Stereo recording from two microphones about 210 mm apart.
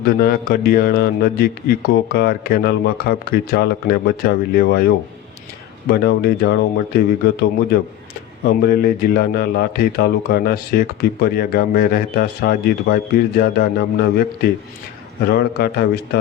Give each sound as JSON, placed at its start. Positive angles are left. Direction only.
{"t": 0.0, "sound": "a man's voice", "side_deg": 45}
{"t": 5.9, "sound": "a man's voice", "side_deg": 50}
{"t": 8.4, "sound": "a man's voice", "side_deg": 45}